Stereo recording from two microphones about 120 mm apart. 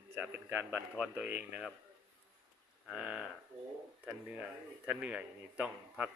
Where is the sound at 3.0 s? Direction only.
5° right (ahead or behind).